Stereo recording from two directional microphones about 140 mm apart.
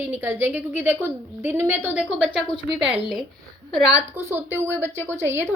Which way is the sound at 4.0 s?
15° right (ahead or behind).